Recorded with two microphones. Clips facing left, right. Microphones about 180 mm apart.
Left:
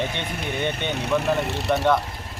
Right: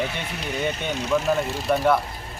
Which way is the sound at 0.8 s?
60° left (ahead or behind).